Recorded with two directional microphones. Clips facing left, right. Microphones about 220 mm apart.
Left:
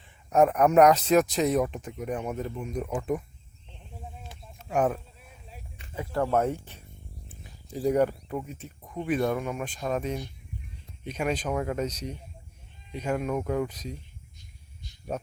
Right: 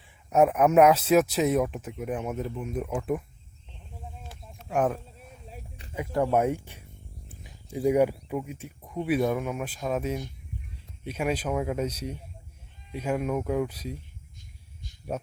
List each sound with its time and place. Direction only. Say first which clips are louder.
0.0 s speech: even; 5° right (ahead or behind)
4.3 s a sound: even; centre (ahead or behind)
5.5 s a sound: right 2 dB; 35° right (ahead or behind)
5.9 s speech: right 1 dB; 15° right (ahead or behind)
7.9 s speech: right 1 dB; 10° right (ahead or behind)
15.1 s speech: even; 5° right (ahead or behind)